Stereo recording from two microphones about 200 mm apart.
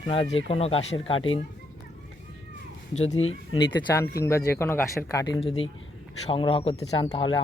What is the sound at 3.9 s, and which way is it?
Speech, 15° left (ahead or behind).